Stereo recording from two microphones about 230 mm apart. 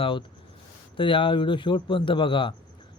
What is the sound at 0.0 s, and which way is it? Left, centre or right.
A man's voice, left.